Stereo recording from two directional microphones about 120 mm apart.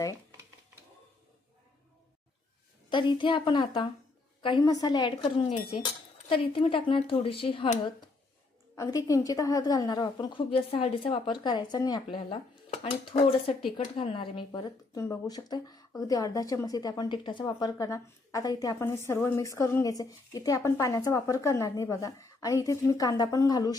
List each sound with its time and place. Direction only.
2.9 s a woman's voice: 40° left (ahead or behind)
8.7 s a woman's voice: 25° left (ahead or behind)
12.7 s dishes: 60° left (ahead or behind)
13.7 s speech: 50° left (ahead or behind)
14.9 s a woman's voice: 25° left (ahead or behind)
15.3 s a woman's voice: 35° left (ahead or behind)